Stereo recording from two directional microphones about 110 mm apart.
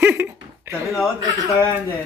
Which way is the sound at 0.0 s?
20° right (ahead or behind).